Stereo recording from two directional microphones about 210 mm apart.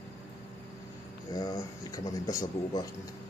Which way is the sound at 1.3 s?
15° left (ahead or behind).